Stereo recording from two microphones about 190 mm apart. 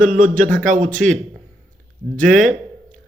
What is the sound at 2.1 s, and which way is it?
Speech, 45° right (ahead or behind).